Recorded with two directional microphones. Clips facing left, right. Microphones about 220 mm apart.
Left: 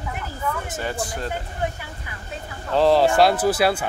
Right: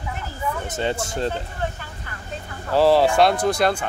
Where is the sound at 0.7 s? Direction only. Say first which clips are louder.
Right 3 dB; 25° right (ahead or behind).